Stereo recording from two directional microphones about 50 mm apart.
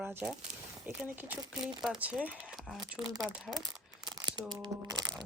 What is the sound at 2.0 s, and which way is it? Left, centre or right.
Speech, right.